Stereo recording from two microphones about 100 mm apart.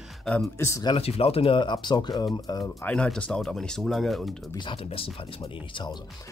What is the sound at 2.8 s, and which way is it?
Speech, 10° left (ahead or behind).